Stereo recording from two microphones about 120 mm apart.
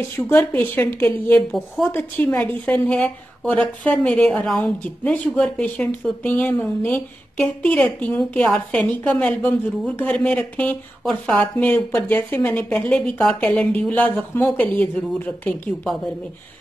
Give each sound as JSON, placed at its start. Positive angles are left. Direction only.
{"t": 0.1, "sound": "a woman's voice", "side_deg": 15}